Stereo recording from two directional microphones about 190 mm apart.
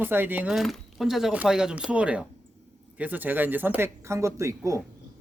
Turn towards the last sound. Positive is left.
turn(degrees=-15)  # may be behind; listen again after turning